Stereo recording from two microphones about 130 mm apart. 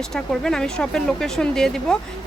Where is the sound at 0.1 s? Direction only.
5° left (ahead or behind).